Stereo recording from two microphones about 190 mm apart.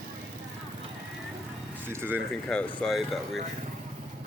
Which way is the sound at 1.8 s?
10° right (ahead or behind).